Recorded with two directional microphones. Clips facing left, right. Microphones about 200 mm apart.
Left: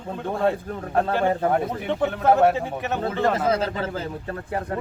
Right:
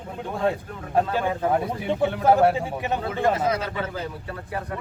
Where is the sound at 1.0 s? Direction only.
45° left (ahead or behind).